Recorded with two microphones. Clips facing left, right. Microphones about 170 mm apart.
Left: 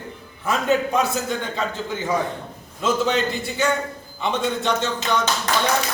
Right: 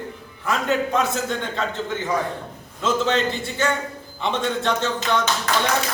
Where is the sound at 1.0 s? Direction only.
5° left (ahead or behind).